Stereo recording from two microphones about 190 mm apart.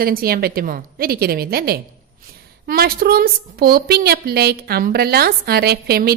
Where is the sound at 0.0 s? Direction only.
50° right (ahead or behind).